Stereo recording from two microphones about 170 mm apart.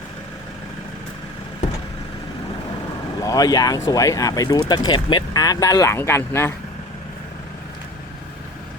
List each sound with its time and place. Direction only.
3.2 s speech: 20° left (ahead or behind)